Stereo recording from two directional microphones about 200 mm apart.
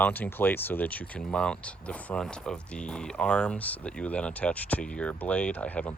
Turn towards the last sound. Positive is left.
turn(degrees=5)  # may be behind; listen again after turning